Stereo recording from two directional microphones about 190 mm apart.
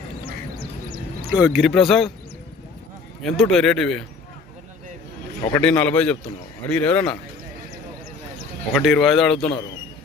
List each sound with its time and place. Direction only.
0.3 s quack: 50° right (ahead or behind)
1.3 s speech: 5° right (ahead or behind)
3.2 s speech: centre (ahead or behind)
5.5 s a man's voice: 10° left (ahead or behind)
8.7 s speech: centre (ahead or behind)